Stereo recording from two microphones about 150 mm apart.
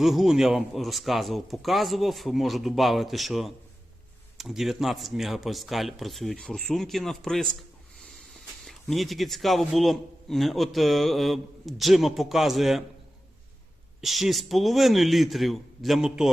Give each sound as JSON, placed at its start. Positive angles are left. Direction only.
{"t": 0.0, "sound": "a man's voice", "side_deg": 0}
{"t": 7.9, "sound": "snort", "side_deg": 0}
{"t": 8.6, "sound": "a man's voice", "side_deg": 0}
{"t": 14.0, "sound": "a man's voice", "side_deg": 0}